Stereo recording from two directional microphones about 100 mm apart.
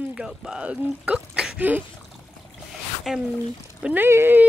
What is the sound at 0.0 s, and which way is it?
Speech, 5° right (ahead or behind).